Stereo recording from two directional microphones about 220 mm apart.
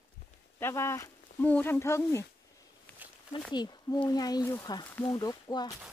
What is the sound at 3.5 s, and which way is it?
Speech, 20° left (ahead or behind).